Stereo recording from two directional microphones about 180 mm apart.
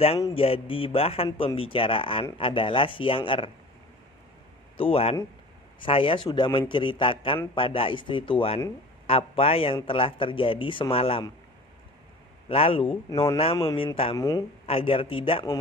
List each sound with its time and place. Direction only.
0.3 s a man's voice: 30° left (ahead or behind)
4.7 s a man's voice: 30° left (ahead or behind)
12.4 s speech: 30° left (ahead or behind)
14.1 s a man's voice: 20° left (ahead or behind)
14.7 s speech: 30° left (ahead or behind)